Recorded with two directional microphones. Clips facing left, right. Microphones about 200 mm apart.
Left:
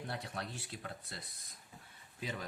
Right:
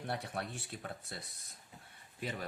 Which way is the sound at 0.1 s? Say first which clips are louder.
Right 6 dB; 60° right (ahead or behind).